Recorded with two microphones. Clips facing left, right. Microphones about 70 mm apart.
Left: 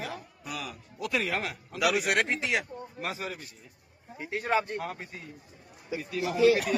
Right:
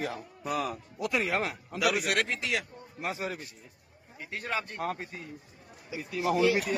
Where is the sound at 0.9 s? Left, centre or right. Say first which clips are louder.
Right 1 dB; centre.